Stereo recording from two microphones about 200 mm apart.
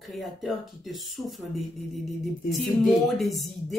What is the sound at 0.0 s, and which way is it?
Speech, centre (ahead or behind).